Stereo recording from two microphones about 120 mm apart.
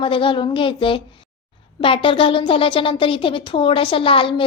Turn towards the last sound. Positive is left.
turn(degrees=50)  # may be behind; listen again after turning